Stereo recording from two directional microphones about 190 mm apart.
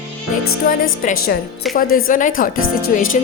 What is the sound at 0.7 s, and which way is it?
Speech, 45° left (ahead or behind).